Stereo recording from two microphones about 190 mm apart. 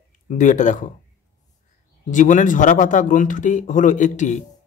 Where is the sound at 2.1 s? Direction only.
40° left (ahead or behind).